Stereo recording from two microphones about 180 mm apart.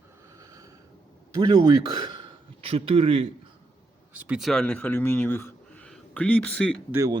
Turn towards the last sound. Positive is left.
turn(degrees=-15)  # may be behind; listen again after turning